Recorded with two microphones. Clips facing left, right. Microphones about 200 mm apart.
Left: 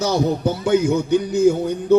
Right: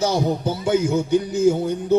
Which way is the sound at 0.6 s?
65° left (ahead or behind).